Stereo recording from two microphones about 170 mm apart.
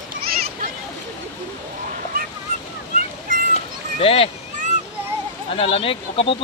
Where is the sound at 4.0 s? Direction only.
35° left (ahead or behind).